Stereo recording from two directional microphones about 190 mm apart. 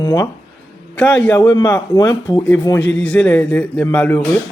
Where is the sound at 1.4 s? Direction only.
20° left (ahead or behind).